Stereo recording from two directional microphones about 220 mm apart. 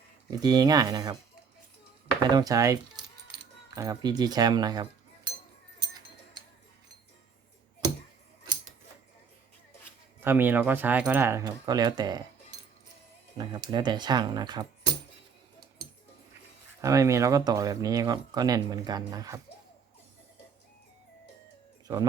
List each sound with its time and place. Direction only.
0.3 s speech: 15° right (ahead or behind)
2.3 s speech: 15° right (ahead or behind)
3.8 s speech: 15° right (ahead or behind)
10.2 s speech: 10° right (ahead or behind)
13.3 s speech: 20° right (ahead or behind)
16.8 s speech: 15° right (ahead or behind)